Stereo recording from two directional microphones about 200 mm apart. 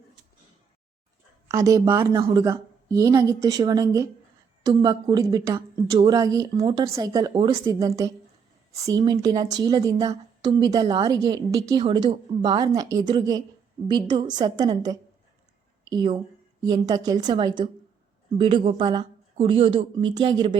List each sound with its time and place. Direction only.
1.5 s a woman's voice: 15° right (ahead or behind)